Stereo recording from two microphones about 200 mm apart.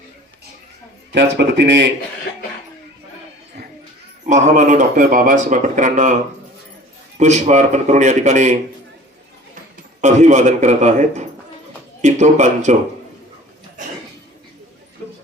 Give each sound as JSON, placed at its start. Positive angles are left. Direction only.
{"t": 1.1, "sound": "speech", "side_deg": -60}
{"t": 4.3, "sound": "speech", "side_deg": -35}
{"t": 7.2, "sound": "speech", "side_deg": -35}
{"t": 10.0, "sound": "speech", "side_deg": -35}